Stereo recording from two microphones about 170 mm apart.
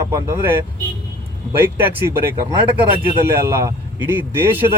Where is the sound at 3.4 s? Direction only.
15° right (ahead or behind).